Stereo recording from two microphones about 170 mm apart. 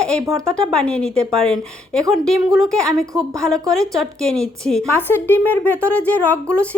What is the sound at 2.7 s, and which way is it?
A woman's voice, 5° left (ahead or behind).